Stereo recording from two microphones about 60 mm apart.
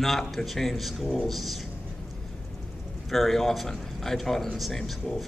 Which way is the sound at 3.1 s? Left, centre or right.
Centre.